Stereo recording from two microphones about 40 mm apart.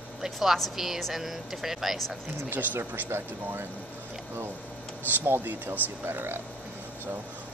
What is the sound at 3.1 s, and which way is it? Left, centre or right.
Speech, right.